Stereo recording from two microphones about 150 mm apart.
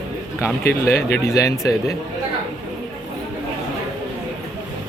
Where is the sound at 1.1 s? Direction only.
20° left (ahead or behind).